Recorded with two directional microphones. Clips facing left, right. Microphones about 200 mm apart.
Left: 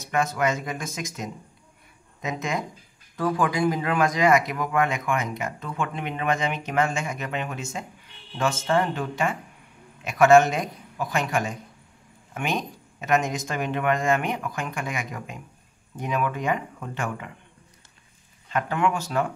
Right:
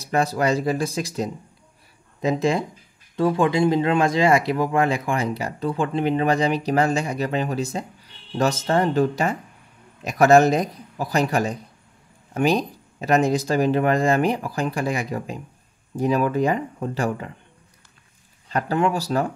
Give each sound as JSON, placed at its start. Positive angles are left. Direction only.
{"t": 0.0, "sound": "speech", "side_deg": -35}
{"t": 18.5, "sound": "speech", "side_deg": -35}